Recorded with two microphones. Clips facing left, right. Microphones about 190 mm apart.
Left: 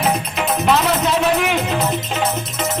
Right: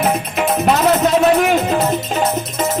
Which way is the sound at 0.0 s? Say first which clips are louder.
Right 3 dB; 50° right (ahead or behind).